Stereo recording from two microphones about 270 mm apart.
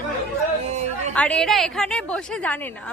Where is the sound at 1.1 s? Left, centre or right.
Centre.